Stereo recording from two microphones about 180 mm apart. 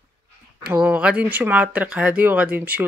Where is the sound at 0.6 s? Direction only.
5° right (ahead or behind).